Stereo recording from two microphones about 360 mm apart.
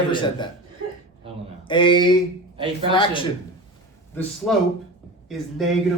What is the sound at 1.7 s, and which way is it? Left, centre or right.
Speech, centre.